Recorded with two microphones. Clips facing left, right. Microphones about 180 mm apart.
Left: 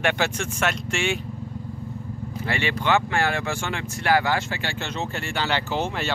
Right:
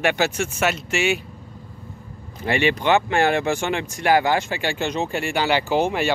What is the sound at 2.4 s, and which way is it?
Speech, 20° right (ahead or behind).